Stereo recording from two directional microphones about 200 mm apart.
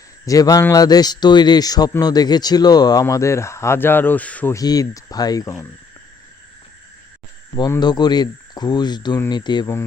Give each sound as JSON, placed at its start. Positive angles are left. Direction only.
{"t": 0.3, "sound": "a man's voice", "side_deg": 15}
{"t": 7.5, "sound": "speech", "side_deg": 20}